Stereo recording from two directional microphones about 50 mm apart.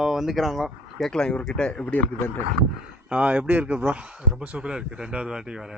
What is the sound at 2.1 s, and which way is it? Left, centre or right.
Speech, left.